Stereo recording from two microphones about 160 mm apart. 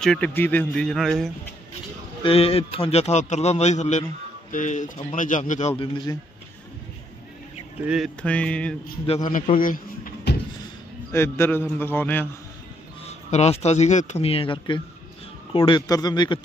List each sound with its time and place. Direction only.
0.0 s a man's voice: 5° left (ahead or behind)
2.2 s a man's voice: 35° left (ahead or behind)
7.8 s a man's voice: 5° right (ahead or behind)
8.2 s a man's voice: 5° left (ahead or behind)
9.6 s a sound: 60° left (ahead or behind)
11.1 s a man's voice: 15° left (ahead or behind)
13.0 s a man's voice: 40° left (ahead or behind); by 16.3 s 25° left (ahead or behind)